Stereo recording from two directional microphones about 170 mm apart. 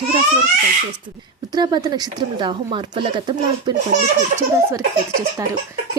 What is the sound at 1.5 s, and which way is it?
A woman's voice, 25° right (ahead or behind).